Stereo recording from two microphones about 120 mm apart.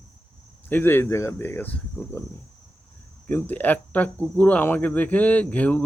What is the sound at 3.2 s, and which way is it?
Speech, 15° left (ahead or behind).